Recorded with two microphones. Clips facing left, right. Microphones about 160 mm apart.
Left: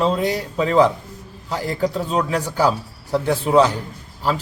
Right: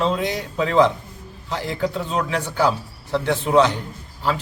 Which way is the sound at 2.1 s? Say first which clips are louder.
Left 1 dB; 10° left (ahead or behind).